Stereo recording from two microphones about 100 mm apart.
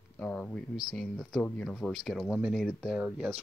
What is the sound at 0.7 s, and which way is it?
Speech, centre (ahead or behind).